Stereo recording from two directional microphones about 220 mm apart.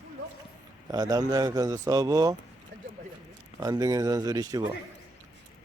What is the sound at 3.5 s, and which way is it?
A man's voice, 15° right (ahead or behind).